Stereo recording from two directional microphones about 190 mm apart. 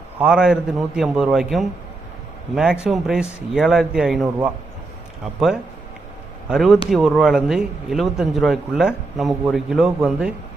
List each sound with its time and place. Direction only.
0.2 s speech: 5° right (ahead or behind)
6.5 s speech: centre (ahead or behind)